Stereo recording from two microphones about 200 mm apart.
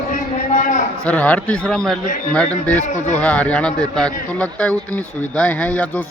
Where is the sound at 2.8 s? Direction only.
35° left (ahead or behind).